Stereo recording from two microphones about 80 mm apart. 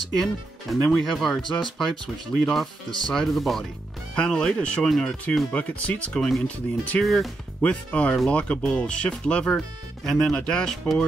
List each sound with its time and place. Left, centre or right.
0.2 s speech: centre
5.5 s speech: centre
7.0 s speech: centre
7.6 s speech: centre